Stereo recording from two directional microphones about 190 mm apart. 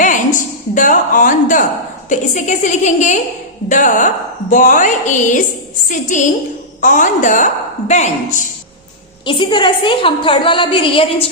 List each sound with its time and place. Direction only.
0.0 s a sound: 40° left (ahead or behind)
2.0 s a woman's voice: 40° left (ahead or behind)
9.2 s a woman's voice: 25° left (ahead or behind)